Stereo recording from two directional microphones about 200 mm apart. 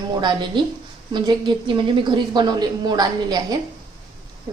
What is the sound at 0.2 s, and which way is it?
A woman's voice, 20° right (ahead or behind).